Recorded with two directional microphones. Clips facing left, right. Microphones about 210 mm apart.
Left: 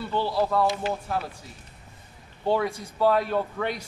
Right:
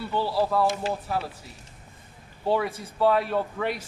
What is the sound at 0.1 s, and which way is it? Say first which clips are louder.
A man's voice: even; 5° right (ahead or behind).